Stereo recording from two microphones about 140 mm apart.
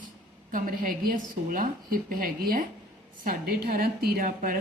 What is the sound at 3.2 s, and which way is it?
A woman's voice, 90° right.